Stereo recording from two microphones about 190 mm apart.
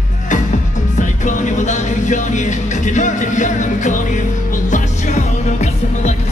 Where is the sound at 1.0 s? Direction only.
40° left (ahead or behind).